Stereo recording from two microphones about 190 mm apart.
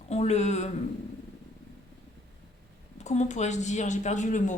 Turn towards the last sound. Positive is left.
turn(degrees=40)  # may be behind; listen again after turning